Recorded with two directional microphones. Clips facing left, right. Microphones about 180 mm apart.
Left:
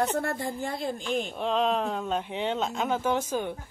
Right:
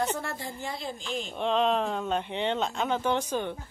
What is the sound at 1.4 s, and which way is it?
Speech, centre (ahead or behind).